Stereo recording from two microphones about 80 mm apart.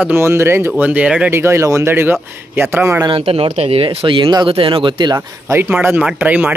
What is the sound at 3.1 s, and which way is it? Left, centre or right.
Speech, right.